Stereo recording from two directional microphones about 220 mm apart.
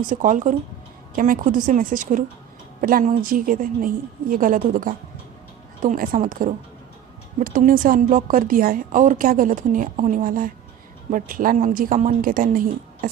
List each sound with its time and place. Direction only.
0.1 s a woman's voice: 35° right (ahead or behind)